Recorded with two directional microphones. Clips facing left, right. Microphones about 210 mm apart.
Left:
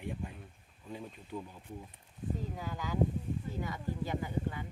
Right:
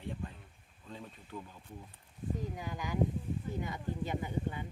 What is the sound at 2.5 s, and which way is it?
Speech, 15° right (ahead or behind).